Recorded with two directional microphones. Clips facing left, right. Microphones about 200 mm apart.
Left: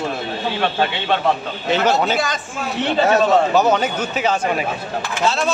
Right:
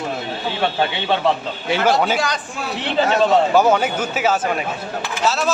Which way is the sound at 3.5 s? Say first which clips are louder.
Right 1 dB; 10° right (ahead or behind).